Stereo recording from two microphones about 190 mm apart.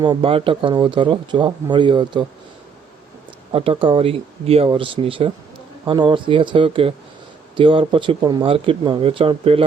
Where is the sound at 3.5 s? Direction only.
30° right (ahead or behind).